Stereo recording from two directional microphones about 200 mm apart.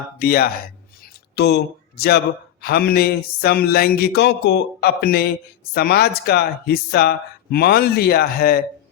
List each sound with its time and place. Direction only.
0.2 s a man's voice: 50° left (ahead or behind)